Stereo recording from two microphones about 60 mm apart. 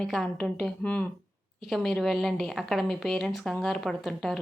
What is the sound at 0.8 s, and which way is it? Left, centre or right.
Speech, left.